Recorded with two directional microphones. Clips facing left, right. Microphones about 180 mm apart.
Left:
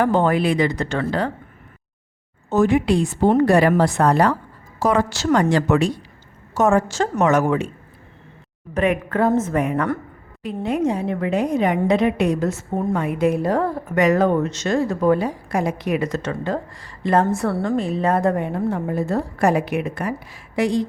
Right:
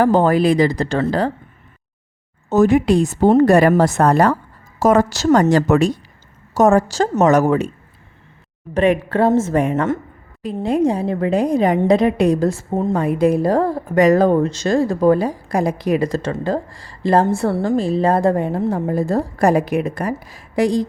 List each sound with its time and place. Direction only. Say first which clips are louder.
0.0 s a woman's voice: right 4 dB; 40° right (ahead or behind)
2.5 s a woman's voice: right 4 dB; 40° right (ahead or behind)
8.7 s a woman's voice: right 4 dB; 30° right (ahead or behind)